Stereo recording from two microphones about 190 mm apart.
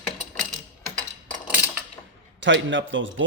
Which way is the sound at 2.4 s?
75° right (ahead or behind).